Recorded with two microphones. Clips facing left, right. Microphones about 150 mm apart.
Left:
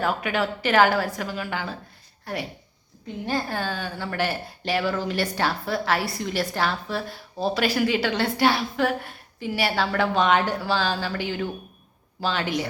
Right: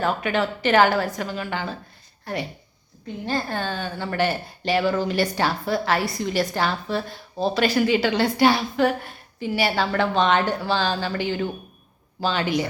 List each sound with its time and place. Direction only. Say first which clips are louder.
0.0 s speech: right 2 dB; 5° left (ahead or behind)